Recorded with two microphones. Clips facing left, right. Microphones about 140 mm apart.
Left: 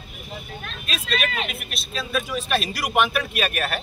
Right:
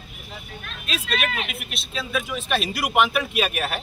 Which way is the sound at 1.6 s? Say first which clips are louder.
Even; 20° right (ahead or behind).